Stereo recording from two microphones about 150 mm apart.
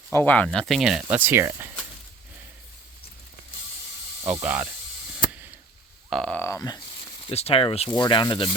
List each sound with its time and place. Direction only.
0.1 s speech: 15° left (ahead or behind); by 1.7 s 20° right (ahead or behind)
4.2 s speech: 15° right (ahead or behind)
6.1 s speech: 5° left (ahead or behind)
7.3 s speech: 40° left (ahead or behind)
7.9 s speech: 30° left (ahead or behind)